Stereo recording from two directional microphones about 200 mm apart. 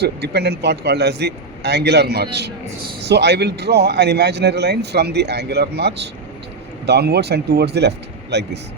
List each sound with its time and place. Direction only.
0.0 s a man's voice: 55° right (ahead or behind)